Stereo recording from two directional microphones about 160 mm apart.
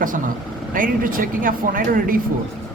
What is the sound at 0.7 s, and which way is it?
Speech, 60° right (ahead or behind).